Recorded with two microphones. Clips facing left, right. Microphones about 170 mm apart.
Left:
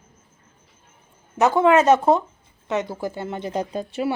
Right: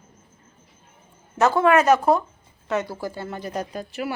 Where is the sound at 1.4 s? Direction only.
20° left (ahead or behind).